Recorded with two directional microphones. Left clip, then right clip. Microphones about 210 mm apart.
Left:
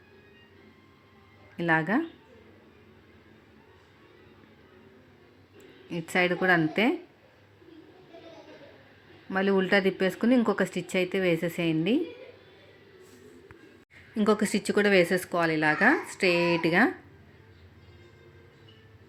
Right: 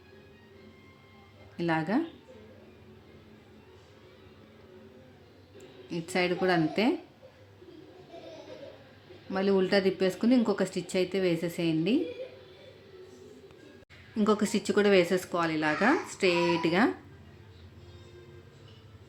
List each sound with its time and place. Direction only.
1.5 s speech: 15° left (ahead or behind)
5.9 s speech: 15° left (ahead or behind)
9.3 s speech: 15° left (ahead or behind)
14.2 s speech: 20° left (ahead or behind)